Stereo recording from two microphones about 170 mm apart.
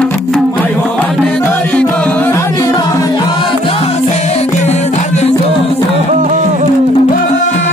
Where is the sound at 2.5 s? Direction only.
20° left (ahead or behind); by 5.3 s 40° left (ahead or behind).